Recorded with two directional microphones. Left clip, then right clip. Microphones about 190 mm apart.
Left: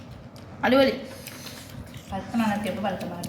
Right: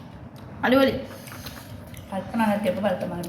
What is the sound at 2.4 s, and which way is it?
Speech, 55° right (ahead or behind).